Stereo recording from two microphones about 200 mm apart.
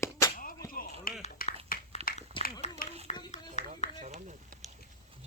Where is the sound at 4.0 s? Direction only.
35° right (ahead or behind).